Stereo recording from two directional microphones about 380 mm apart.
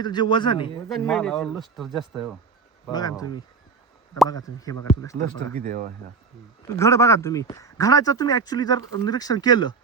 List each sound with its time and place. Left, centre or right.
0.0 s speech: centre
0.9 s speech: centre
2.8 s speech: centre
5.5 s speech: centre
6.7 s speech: centre